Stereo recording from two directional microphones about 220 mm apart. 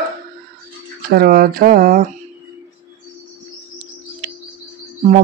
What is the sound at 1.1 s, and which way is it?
Speech, 45° right (ahead or behind).